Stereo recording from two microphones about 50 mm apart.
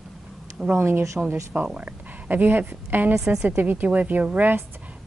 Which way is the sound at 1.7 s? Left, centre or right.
Right.